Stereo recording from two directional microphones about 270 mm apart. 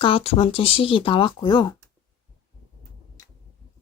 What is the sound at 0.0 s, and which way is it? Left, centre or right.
Speech, left.